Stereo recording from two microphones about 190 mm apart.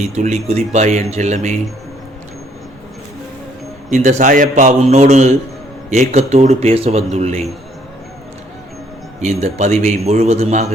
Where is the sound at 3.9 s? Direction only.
40° right (ahead or behind).